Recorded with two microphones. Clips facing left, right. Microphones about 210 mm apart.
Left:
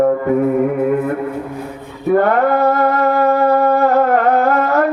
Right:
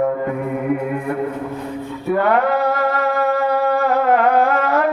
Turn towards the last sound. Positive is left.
turn(degrees=45)  # may be behind; listen again after turning